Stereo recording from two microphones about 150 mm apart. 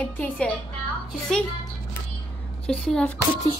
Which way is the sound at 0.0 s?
10° left (ahead or behind).